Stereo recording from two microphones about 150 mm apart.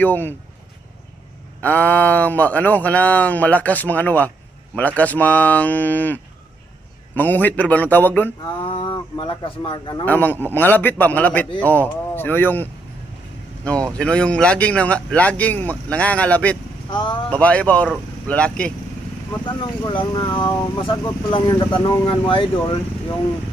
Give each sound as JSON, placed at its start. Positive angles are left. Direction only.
{"t": 0.0, "sound": "speech", "side_deg": 15}
{"t": 1.6, "sound": "speech", "side_deg": 10}
{"t": 7.2, "sound": "speech", "side_deg": 10}
{"t": 8.6, "sound": "cattle", "side_deg": 35}
{"t": 10.1, "sound": "speech", "side_deg": 10}
{"t": 13.7, "sound": "speech", "side_deg": 5}
{"t": 16.9, "sound": "cattle", "side_deg": 30}
{"t": 17.2, "sound": "speech", "side_deg": 10}
{"t": 19.8, "sound": "speech", "side_deg": 30}
{"t": 20.7, "sound": "cattle", "side_deg": 30}